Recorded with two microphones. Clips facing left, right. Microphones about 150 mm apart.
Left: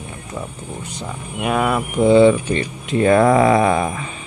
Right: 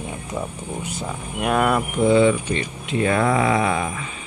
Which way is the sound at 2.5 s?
40° left (ahead or behind).